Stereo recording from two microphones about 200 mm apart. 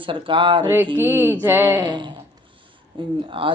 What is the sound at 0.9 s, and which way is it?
Speech, 10° right (ahead or behind).